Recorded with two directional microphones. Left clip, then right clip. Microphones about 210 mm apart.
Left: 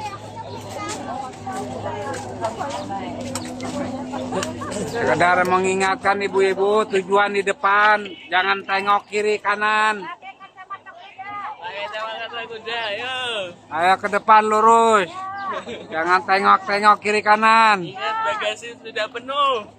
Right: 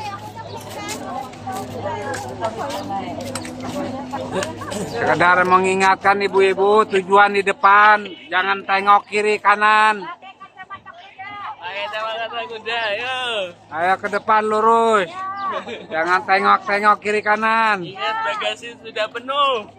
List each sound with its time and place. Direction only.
5.1 s a man's voice: 10° right (ahead or behind)
11.6 s a sound: 25° right (ahead or behind)
13.7 s a man's voice: 10° left (ahead or behind)
15.3 s speech: 10° right (ahead or behind); by 17.8 s 15° left (ahead or behind)
17.9 s a man's voice: 10° right (ahead or behind)